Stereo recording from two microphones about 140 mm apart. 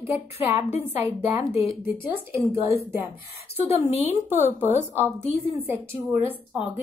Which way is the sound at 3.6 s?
45° left (ahead or behind).